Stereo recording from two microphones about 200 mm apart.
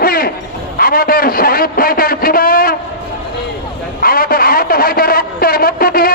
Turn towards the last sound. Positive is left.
turn(degrees=45)  # may be behind; listen again after turning